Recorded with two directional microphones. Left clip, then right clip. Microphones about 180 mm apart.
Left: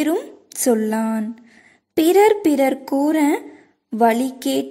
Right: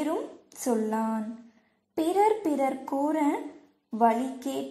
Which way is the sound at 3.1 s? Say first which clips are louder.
Left 9 dB; 60° left (ahead or behind).